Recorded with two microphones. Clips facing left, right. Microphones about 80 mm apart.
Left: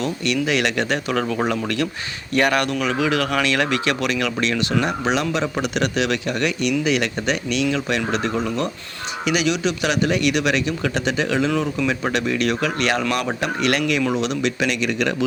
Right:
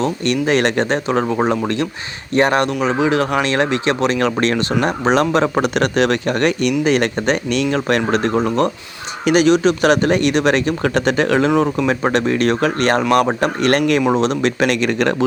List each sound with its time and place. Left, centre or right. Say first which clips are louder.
0.0 s speech: right 4 dB; right